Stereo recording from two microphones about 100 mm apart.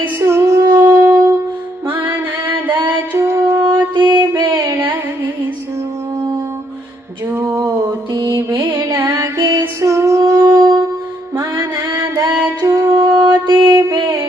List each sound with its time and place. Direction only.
0.0 s female singing: 25° right (ahead or behind)
0.9 s music: 30° right (ahead or behind)
1.9 s music: 20° right (ahead or behind)
4.0 s mantra: 20° right (ahead or behind)
7.3 s a sound: 30° right (ahead or behind)
8.3 s music: 30° right (ahead or behind)
11.3 s mantra: 30° right (ahead or behind)
13.5 s music: 25° right (ahead or behind)